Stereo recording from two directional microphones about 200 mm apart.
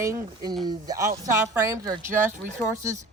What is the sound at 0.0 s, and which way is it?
Speech, 15° right (ahead or behind).